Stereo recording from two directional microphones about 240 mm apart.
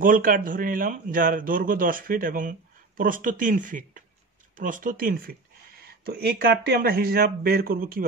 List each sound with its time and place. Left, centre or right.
0.0 s speech: right